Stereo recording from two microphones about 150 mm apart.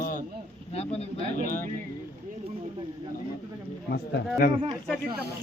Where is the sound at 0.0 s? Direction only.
65° left (ahead or behind).